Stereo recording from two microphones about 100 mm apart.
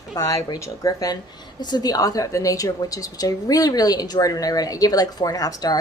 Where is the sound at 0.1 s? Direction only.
35° left (ahead or behind).